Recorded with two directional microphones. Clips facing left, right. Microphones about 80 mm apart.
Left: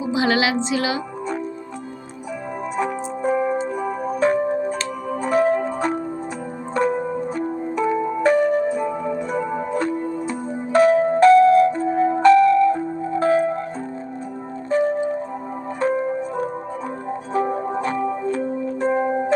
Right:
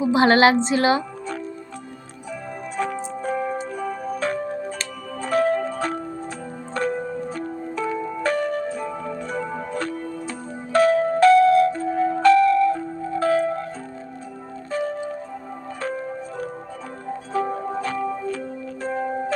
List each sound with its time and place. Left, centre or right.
0.1 s a woman's voice: right
2.7 s music: centre
14.7 s music: left